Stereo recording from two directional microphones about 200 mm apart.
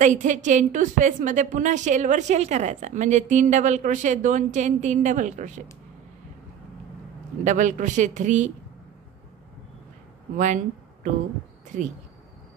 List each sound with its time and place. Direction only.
0.0 s a woman's voice: 40° right (ahead or behind)
7.4 s a woman's voice: 40° right (ahead or behind)
10.3 s a woman's voice: 40° right (ahead or behind)
11.7 s a woman's voice: 40° right (ahead or behind)